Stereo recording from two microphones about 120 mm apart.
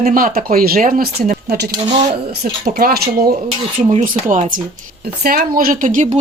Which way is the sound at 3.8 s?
80° right.